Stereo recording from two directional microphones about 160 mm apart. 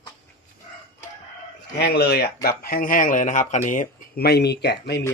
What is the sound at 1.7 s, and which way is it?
Speech, 90° left.